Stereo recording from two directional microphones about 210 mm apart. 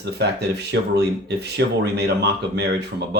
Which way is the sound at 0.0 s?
50° right (ahead or behind).